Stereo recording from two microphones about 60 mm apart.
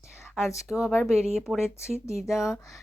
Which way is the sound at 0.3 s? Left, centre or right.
Centre.